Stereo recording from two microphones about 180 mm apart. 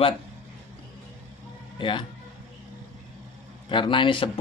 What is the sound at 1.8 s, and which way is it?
Speech, 25° left (ahead or behind).